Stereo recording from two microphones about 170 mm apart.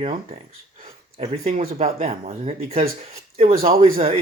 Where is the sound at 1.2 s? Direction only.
40° right (ahead or behind).